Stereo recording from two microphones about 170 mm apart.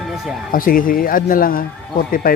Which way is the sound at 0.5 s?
55° left (ahead or behind).